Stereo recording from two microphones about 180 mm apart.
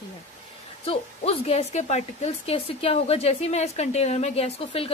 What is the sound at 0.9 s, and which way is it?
Speech, 35° left (ahead or behind).